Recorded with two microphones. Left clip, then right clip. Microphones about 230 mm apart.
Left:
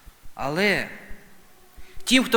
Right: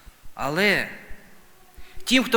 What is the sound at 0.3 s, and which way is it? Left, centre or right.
Speech, centre.